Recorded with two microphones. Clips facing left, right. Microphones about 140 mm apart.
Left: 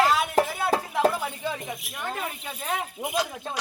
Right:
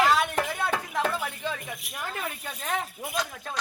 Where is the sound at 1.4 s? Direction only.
10° left (ahead or behind).